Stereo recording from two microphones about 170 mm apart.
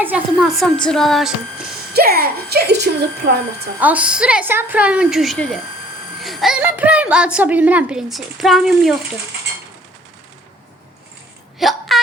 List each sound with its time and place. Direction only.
0.0 s a woman's voice: 5° right (ahead or behind)
1.9 s a child's voice: 65° right (ahead or behind)
3.8 s a woman's voice: 10° right (ahead or behind)
11.6 s a sound: centre (ahead or behind)